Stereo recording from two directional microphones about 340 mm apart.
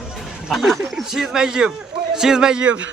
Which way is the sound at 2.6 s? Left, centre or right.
Right.